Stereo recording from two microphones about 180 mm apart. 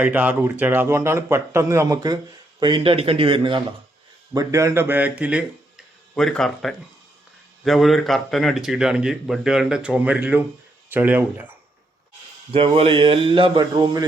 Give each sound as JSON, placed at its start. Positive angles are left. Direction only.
{"t": 0.0, "sound": "speech", "side_deg": -10}
{"t": 4.4, "sound": "speech", "side_deg": -15}
{"t": 12.5, "sound": "speech", "side_deg": -30}